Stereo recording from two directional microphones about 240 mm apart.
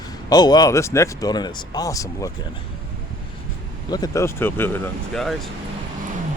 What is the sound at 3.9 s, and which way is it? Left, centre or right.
Speech, centre.